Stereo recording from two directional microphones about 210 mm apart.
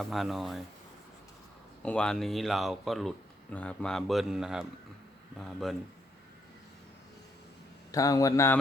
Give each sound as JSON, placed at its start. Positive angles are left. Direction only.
{"t": 0.0, "sound": "speech", "side_deg": 0}
{"t": 1.8, "sound": "speech", "side_deg": 5}
{"t": 7.9, "sound": "a man's voice", "side_deg": 15}